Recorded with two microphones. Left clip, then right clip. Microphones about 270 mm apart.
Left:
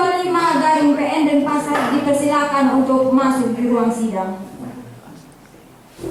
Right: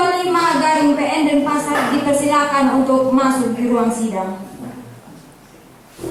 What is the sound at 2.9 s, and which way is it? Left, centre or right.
A man's voice, centre.